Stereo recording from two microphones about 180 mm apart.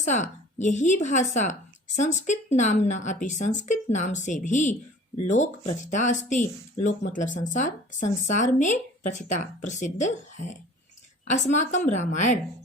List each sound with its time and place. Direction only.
0.0 s a woman's voice: 40° left (ahead or behind)